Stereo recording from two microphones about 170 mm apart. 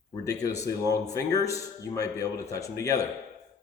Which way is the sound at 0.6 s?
20° left (ahead or behind).